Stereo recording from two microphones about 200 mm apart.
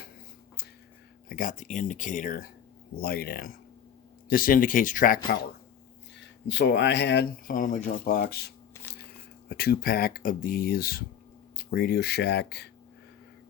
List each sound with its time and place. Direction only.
1.3 s speech: 40° left (ahead or behind)
6.5 s speech: 60° left (ahead or behind)